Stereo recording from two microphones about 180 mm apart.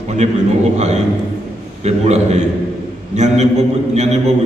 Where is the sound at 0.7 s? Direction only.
40° right (ahead or behind).